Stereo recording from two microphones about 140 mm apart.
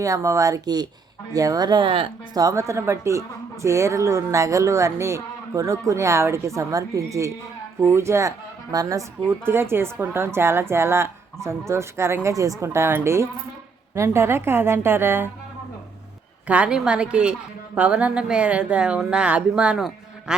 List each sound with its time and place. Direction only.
0.0 s a woman's voice: 20° right (ahead or behind); by 2.4 s 40° right (ahead or behind)
2.4 s a woman's voice: 20° right (ahead or behind)
16.5 s speech: 10° right (ahead or behind)